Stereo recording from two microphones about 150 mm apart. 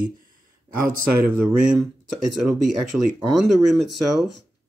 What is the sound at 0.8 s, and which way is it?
Speech, 10° right (ahead or behind).